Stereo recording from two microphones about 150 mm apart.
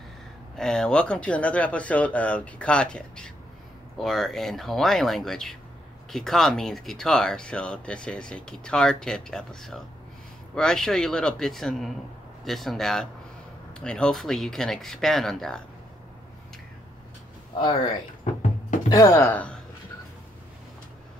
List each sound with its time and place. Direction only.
0.6 s speech: 5° left (ahead or behind)
17.6 s speech: 30° left (ahead or behind); by 19.5 s 10° left (ahead or behind)